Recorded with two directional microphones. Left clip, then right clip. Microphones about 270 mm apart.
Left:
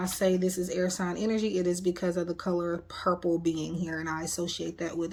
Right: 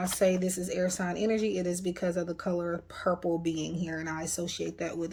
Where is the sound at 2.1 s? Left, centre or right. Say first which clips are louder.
Left 1 dB; centre.